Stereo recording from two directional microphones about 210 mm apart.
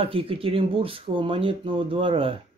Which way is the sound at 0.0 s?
25° right (ahead or behind).